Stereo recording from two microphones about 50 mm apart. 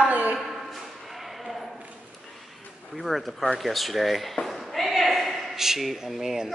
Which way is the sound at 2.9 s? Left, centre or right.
Centre.